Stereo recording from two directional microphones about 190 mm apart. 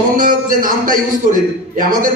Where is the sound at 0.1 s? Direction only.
45° right (ahead or behind).